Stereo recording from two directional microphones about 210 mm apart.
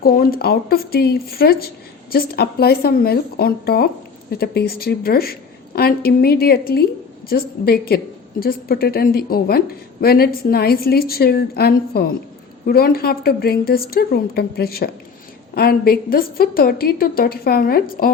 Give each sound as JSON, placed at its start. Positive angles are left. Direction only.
{"t": 0.0, "sound": "a woman's voice", "side_deg": 45}